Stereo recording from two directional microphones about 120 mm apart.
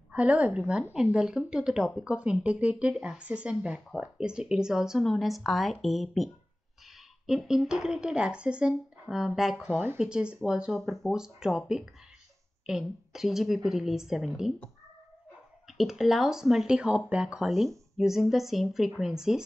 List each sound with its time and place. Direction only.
0.1 s a woman's voice: 10° right (ahead or behind)
15.6 s speech: 5° right (ahead or behind)